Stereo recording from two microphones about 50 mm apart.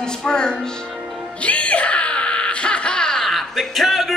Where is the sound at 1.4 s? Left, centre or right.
Left.